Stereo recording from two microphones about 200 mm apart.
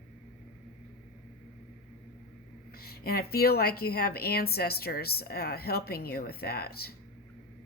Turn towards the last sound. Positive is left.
turn(degrees=50)  # may be behind; listen again after turning